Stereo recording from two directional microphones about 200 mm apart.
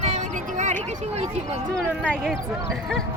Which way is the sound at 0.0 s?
35° right (ahead or behind).